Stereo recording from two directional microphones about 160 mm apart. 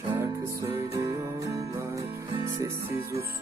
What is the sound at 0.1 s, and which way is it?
Music, 20° right (ahead or behind).